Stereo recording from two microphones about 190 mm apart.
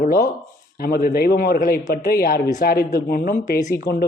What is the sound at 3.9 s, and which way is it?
Speech, 15° left (ahead or behind).